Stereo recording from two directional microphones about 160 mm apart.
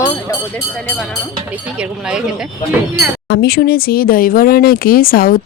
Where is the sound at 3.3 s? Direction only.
80° left.